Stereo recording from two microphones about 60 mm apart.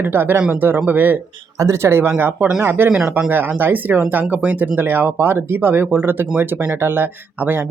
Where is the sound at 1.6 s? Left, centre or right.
Right.